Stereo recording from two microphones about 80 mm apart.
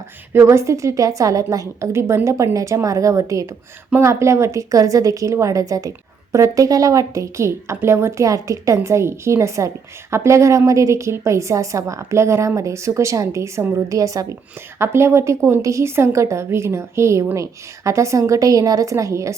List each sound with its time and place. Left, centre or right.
0.3 s a woman's voice: right
14.8 s a woman's voice: right